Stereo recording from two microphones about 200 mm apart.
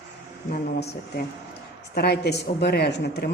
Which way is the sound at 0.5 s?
55° left (ahead or behind).